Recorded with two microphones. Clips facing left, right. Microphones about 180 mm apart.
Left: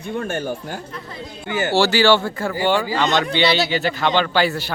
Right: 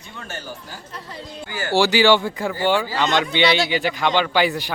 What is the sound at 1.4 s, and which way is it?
Speech, 20° left (ahead or behind).